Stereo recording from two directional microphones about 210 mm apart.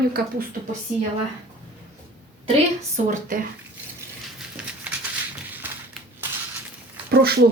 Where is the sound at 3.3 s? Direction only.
40° right (ahead or behind).